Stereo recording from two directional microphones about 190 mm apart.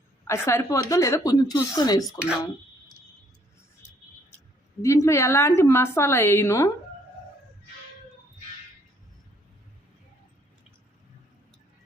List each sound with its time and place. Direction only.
0.3 s a woman's voice: 15° left (ahead or behind)
2.0 s speech: 5° right (ahead or behind)
4.8 s a woman's voice: 15° left (ahead or behind)